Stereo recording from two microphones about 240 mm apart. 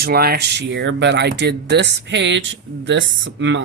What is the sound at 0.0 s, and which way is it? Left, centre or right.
Speech, right.